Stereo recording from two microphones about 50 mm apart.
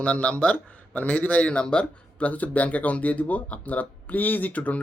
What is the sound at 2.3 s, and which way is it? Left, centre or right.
Speech, left.